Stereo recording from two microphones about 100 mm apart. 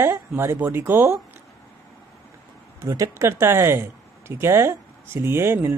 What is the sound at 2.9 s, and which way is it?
Speech, 35° right (ahead or behind).